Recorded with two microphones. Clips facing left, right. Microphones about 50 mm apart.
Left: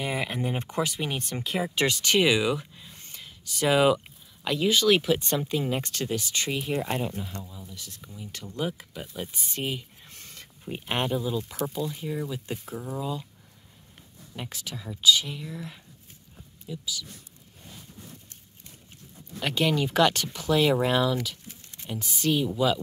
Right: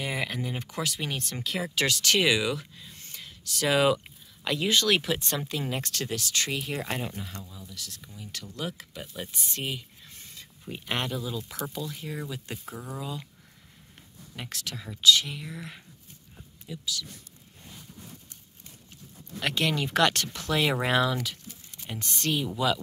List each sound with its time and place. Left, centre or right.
0.0 s speech: centre
0.3 s speech: left
0.7 s speech: centre
5.8 s speech: centre
6.7 s speech: centre
11.9 s speech: centre
12.7 s speech: centre
13.0 s speech: centre
14.5 s speech: centre
14.8 s speech: centre
16.6 s speech: centre
19.4 s speech: centre